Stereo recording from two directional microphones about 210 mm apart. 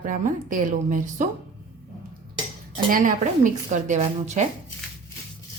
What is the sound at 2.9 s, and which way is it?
A woman's voice, 40° right (ahead or behind).